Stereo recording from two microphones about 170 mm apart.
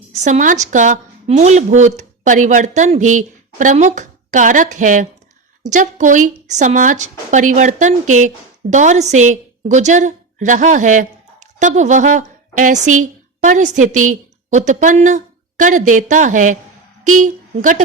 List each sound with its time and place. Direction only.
0.1 s a woman's voice: 50° right (ahead or behind)